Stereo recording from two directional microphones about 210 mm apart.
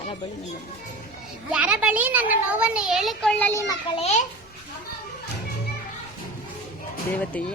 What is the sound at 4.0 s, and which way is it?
Speech, 35° left (ahead or behind).